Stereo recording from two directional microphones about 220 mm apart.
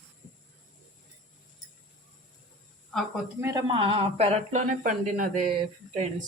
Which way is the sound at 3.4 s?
20° right (ahead or behind).